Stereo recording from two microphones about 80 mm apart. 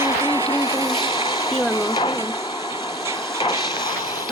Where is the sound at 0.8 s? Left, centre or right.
Left.